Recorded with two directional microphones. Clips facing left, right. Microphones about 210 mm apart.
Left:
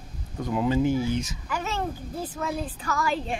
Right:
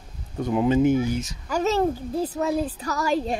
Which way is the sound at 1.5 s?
40° right (ahead or behind).